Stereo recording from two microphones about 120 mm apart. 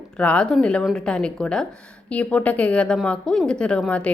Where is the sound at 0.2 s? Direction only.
10° left (ahead or behind).